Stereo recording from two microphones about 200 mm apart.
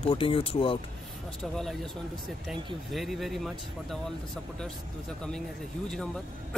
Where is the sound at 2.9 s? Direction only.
Centre (ahead or behind).